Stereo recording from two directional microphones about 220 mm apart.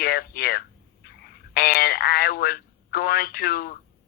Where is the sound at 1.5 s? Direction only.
45° left (ahead or behind).